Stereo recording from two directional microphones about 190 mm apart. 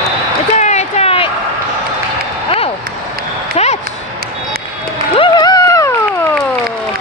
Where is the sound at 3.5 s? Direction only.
35° left (ahead or behind).